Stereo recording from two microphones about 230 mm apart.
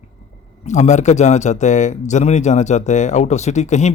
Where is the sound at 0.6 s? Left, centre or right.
Left.